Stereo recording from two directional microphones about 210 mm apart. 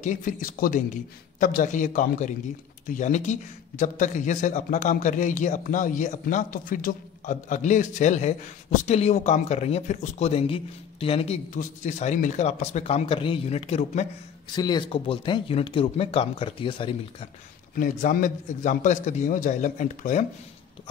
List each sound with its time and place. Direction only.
0.0 s a man's voice: 40° left (ahead or behind)
14.5 s speech: 20° left (ahead or behind)
17.7 s a man's voice: 40° left (ahead or behind)